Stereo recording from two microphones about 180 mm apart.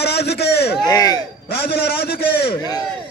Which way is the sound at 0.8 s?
20° left (ahead or behind).